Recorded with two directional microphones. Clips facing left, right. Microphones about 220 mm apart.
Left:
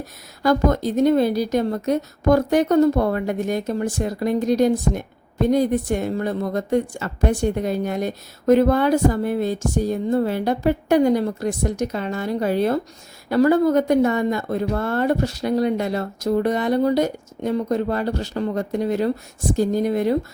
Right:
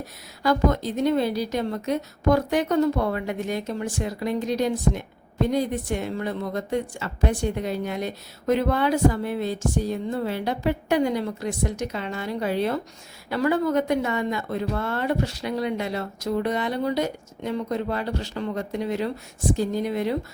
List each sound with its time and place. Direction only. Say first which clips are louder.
0.4 s a woman's voice: left 4 dB; 45° left (ahead or behind)